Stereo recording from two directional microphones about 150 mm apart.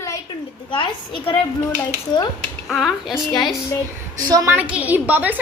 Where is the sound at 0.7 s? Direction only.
35° left (ahead or behind).